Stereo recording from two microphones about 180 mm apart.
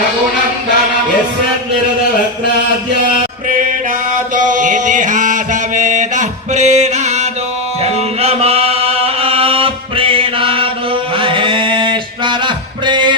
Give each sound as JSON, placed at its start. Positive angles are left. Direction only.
{"t": 4.4, "sound": "music", "side_deg": -45}
{"t": 8.2, "sound": "chant", "side_deg": -35}
{"t": 11.2, "sound": "mantra", "side_deg": -30}
{"t": 12.8, "sound": "music", "side_deg": -25}